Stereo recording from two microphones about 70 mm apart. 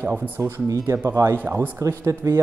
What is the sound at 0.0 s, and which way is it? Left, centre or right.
Speech, right.